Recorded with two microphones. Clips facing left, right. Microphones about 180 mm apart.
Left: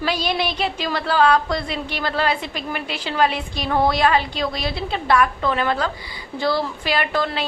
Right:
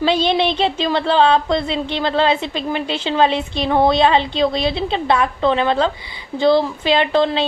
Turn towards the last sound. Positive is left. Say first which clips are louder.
# right 6 dB
turn(degrees=-25)  # may be behind; listen again after turning